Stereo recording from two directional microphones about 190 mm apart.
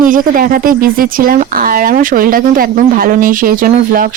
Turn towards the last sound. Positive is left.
turn(degrees=-45)  # may be behind; listen again after turning